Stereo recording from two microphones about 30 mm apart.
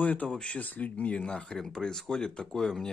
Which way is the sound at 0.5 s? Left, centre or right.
Left.